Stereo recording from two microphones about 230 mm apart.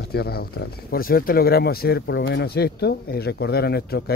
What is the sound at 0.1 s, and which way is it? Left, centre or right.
Speech, left.